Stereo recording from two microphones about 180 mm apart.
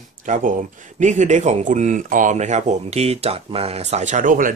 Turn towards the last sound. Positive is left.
turn(degrees=-45)  # may be behind; listen again after turning